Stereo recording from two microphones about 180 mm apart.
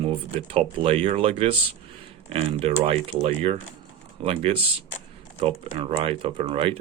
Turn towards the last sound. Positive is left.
turn(degrees=-30)  # may be behind; listen again after turning